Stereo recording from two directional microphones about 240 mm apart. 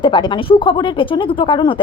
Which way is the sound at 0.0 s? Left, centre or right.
Centre.